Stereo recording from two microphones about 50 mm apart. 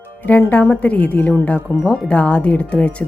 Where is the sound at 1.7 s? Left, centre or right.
Left.